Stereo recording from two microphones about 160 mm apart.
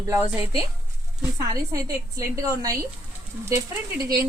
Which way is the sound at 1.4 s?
20° right (ahead or behind).